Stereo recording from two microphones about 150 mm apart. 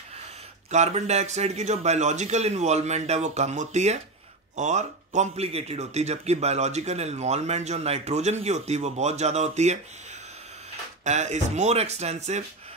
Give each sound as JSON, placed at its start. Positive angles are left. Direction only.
{"t": 0.7, "sound": "a man's voice", "side_deg": -50}
{"t": 11.1, "sound": "a man's voice", "side_deg": -50}